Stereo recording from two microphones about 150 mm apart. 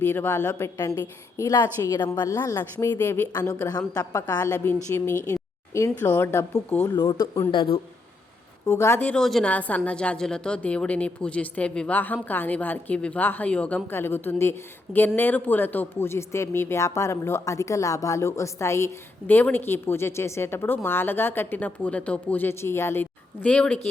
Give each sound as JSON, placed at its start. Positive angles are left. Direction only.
{"t": 0.0, "sound": "a woman's voice", "side_deg": 15}
{"t": 2.7, "sound": "a woman's voice", "side_deg": 15}
{"t": 4.5, "sound": "a woman's voice", "side_deg": 15}
{"t": 7.1, "sound": "speech", "side_deg": 35}
{"t": 8.6, "sound": "a woman's voice", "side_deg": 15}